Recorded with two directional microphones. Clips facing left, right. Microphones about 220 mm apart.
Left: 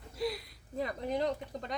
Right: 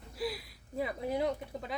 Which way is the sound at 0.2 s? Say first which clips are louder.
Left 2 dB; 5° right (ahead or behind).